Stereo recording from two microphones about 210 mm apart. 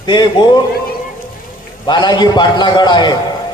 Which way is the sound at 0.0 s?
20° left (ahead or behind).